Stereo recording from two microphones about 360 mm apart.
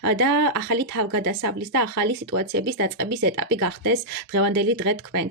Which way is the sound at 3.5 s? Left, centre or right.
Right.